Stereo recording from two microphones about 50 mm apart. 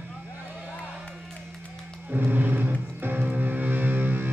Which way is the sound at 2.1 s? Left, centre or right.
Right.